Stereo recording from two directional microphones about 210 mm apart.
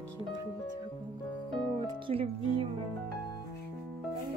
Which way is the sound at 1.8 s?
25° right (ahead or behind).